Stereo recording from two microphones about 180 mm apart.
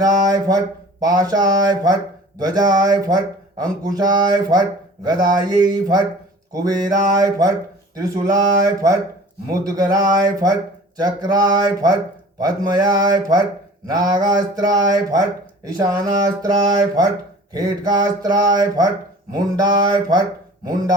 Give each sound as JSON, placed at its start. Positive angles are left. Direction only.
{"t": 0.0, "sound": "speech", "side_deg": -20}